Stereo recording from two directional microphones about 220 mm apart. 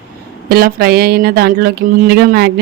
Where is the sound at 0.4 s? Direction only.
45° right (ahead or behind).